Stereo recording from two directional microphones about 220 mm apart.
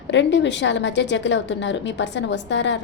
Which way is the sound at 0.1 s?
55° left (ahead or behind).